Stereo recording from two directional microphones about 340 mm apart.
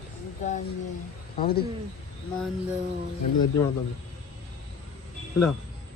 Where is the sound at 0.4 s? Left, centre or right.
Left.